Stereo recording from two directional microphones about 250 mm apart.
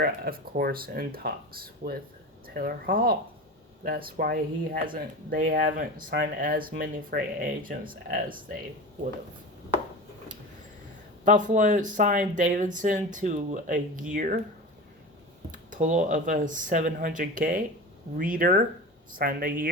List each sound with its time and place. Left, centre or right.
0.0 s speech: right
11.3 s speech: right
15.5 s speech: right